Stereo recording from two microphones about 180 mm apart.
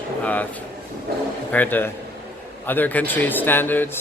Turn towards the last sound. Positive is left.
turn(degrees=10)  # may be behind; listen again after turning